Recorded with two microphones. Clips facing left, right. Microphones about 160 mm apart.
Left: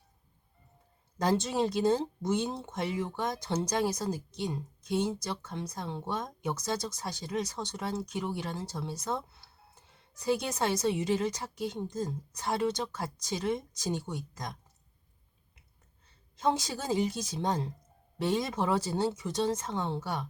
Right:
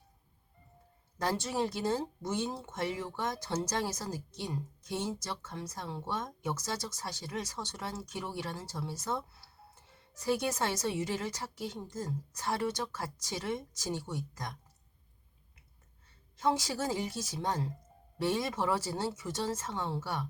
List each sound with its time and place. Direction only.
1.2 s a woman's voice: 20° left (ahead or behind)
16.4 s a woman's voice: 20° left (ahead or behind)